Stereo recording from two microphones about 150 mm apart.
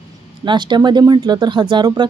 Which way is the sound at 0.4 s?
30° right (ahead or behind).